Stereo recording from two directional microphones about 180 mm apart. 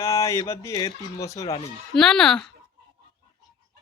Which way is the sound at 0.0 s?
15° left (ahead or behind).